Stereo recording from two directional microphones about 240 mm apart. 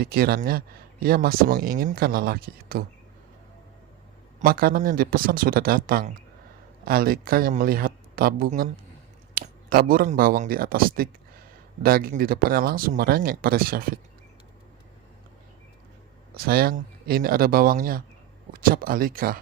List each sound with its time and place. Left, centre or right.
0.0 s speech: right
4.4 s speech: right
16.3 s speech: right